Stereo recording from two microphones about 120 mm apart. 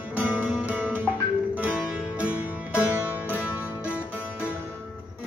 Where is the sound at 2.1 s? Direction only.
10° right (ahead or behind).